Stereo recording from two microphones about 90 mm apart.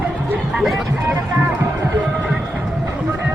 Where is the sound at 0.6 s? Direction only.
5° right (ahead or behind).